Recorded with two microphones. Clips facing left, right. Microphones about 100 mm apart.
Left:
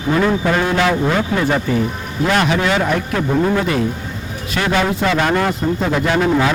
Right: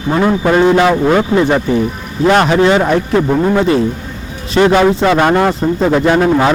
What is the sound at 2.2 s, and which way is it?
A man's voice, 35° right (ahead or behind).